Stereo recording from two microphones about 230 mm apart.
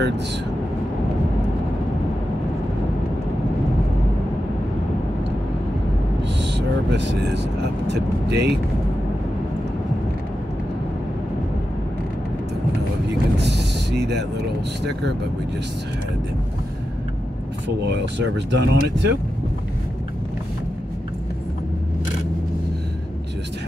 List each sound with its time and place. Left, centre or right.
6.2 s vehicle: right
7.9 s speech: right
13.4 s a sound: right
17.6 s speech: right